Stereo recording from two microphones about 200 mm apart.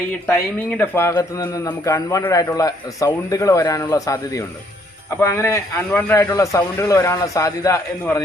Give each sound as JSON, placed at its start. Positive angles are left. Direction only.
{"t": 0.3, "sound": "a man's voice", "side_deg": 10}